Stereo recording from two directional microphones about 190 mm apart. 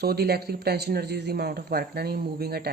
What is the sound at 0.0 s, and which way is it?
Speech, 55° right (ahead or behind).